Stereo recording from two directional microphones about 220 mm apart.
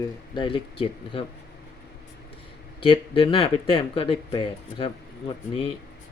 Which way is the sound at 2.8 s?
25° left (ahead or behind).